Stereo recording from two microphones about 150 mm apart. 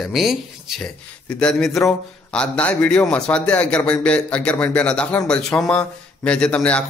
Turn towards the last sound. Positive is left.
turn(degrees=10)  # may be behind; listen again after turning